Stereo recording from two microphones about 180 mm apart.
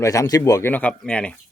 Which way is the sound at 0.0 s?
20° left (ahead or behind).